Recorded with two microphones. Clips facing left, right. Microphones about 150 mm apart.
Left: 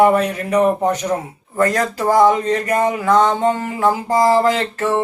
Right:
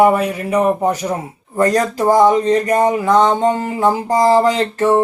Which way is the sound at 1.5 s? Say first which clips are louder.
Right 3 dB; 30° right (ahead or behind).